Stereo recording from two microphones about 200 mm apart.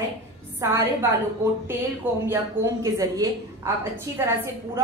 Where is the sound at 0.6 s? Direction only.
15° right (ahead or behind).